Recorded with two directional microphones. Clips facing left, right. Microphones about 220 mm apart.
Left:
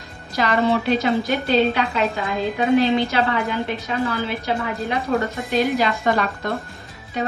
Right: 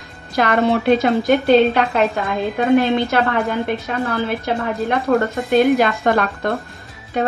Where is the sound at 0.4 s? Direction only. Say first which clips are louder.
Right 4 dB; 55° right (ahead or behind).